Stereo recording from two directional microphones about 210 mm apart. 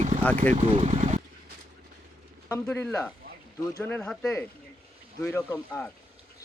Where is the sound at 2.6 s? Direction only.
10° left (ahead or behind).